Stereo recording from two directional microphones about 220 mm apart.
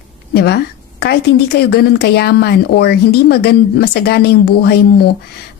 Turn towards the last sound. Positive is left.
turn(degrees=45)  # may be behind; listen again after turning